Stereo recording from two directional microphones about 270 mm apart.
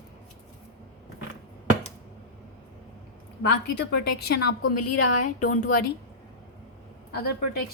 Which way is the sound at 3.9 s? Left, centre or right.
Left.